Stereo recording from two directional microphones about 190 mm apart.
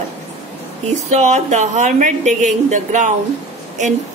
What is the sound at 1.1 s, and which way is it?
Speech, 40° right (ahead or behind).